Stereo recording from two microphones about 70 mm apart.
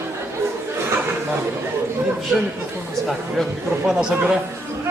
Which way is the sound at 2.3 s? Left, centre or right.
Centre.